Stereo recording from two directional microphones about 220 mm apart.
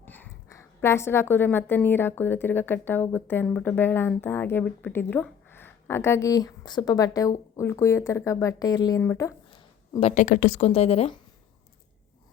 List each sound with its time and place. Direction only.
0.0 s a woman's voice: 10° left (ahead or behind)
10.0 s a woman's voice: 30° left (ahead or behind)